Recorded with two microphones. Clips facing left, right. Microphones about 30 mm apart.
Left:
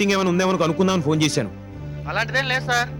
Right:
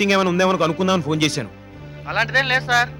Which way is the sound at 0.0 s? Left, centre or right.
Right.